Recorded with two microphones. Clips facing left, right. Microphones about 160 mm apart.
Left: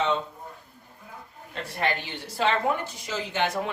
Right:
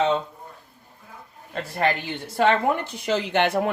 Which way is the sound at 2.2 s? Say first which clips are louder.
Right 5 dB; 55° right (ahead or behind).